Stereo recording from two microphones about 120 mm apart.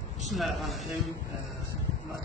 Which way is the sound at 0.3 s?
Centre (ahead or behind).